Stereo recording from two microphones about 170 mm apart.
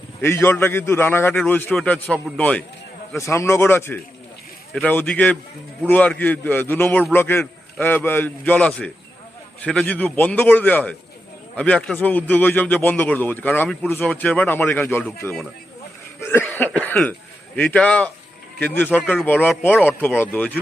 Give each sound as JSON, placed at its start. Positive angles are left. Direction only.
{"t": 0.2, "sound": "a man's voice", "side_deg": 15}
{"t": 15.0, "sound": "a man's voice", "side_deg": 0}
{"t": 16.2, "sound": "a man's voice", "side_deg": 15}